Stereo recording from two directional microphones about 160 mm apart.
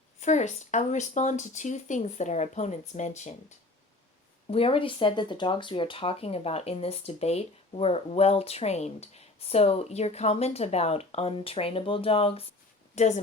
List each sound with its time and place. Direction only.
0.2 s speech: 50° left (ahead or behind)
4.5 s speech: 35° left (ahead or behind)
13.0 s speech: 45° left (ahead or behind)